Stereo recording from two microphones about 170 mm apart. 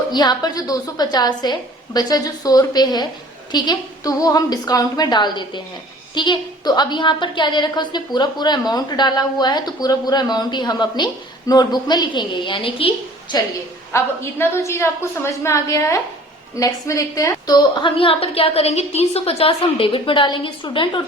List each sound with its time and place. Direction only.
0.1 s a woman's voice: 25° left (ahead or behind)
13.9 s a woman's voice: 15° left (ahead or behind)